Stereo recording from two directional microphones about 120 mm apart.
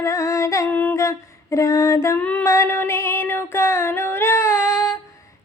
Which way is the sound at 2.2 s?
10° left (ahead or behind).